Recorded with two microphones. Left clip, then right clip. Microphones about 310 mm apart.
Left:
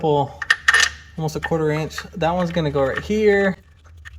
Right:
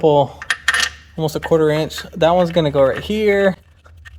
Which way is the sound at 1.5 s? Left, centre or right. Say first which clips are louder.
Right 7 dB; right.